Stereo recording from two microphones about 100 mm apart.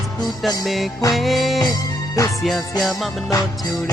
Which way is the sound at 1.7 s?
35° left (ahead or behind).